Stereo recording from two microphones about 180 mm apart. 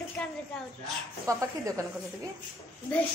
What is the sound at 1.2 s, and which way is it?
Speech, 15° right (ahead or behind).